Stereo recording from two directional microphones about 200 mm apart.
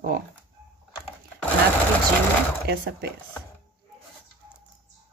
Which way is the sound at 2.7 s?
55° right (ahead or behind).